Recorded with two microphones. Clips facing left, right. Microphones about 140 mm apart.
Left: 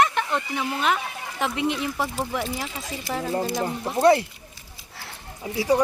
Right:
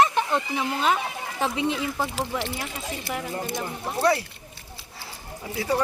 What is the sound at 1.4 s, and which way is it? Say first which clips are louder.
Speech: even; 25° right (ahead or behind).